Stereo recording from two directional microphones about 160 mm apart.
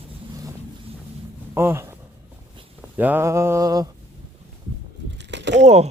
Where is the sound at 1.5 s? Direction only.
15° right (ahead or behind).